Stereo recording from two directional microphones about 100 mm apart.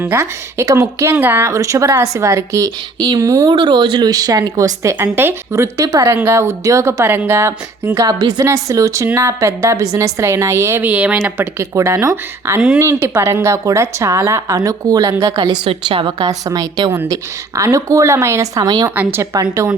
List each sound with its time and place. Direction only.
0.0 s speech: 25° right (ahead or behind)
1.1 s a woman's voice: 20° right (ahead or behind)
3.5 s a woman's voice: 50° right (ahead or behind); by 8.0 s 25° right (ahead or behind)
8.0 s a woman's voice: 40° right (ahead or behind)
10.8 s speech: 15° right (ahead or behind)
11.2 s a woman's voice: 30° right (ahead or behind)
15.4 s a woman's voice: 55° right (ahead or behind)
16.2 s a woman's voice: 40° right (ahead or behind)
18.9 s speech: 25° right (ahead or behind)